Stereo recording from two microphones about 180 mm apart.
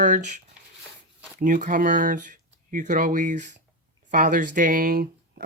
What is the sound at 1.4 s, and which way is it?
Speech, 45° right (ahead or behind).